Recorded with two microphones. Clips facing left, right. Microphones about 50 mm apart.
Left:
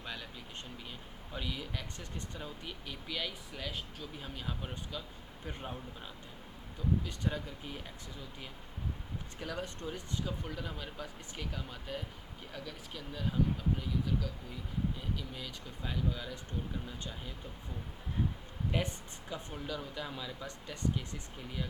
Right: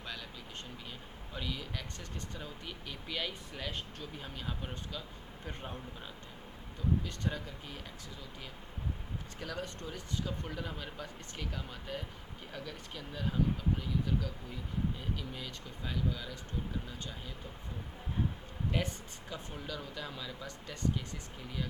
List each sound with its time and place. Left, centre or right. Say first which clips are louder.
1.3 s speech: even; centre
7.0 s speech: left 1 dB; centre
9.4 s speech: left 1 dB; centre
10.2 s speech: even; centre
15.3 s speech: right 1 dB; centre
18.7 s speech: left 1 dB; centre